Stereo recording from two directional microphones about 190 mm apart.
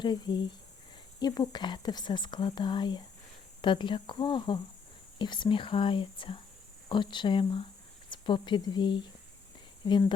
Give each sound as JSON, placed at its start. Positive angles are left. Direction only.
{"t": 0.0, "sound": "speech", "side_deg": 25}